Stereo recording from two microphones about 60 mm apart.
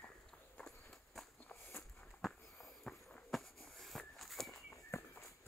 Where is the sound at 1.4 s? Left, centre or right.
Left.